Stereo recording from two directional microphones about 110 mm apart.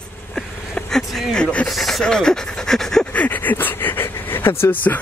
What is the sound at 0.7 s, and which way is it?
Speech, 5° left (ahead or behind).